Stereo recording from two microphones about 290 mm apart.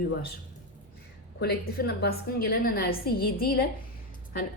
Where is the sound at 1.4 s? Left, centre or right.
Left.